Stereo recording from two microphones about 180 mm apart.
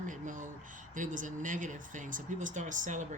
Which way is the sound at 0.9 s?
45° right (ahead or behind).